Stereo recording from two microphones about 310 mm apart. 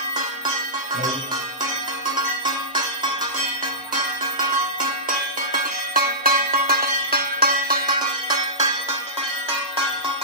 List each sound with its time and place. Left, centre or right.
5.9 s music: right